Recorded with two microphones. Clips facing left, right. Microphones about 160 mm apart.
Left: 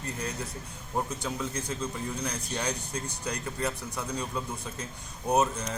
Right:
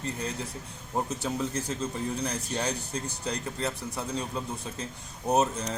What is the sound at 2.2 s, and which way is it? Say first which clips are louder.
Speech: right 2 dB; 30° right (ahead or behind).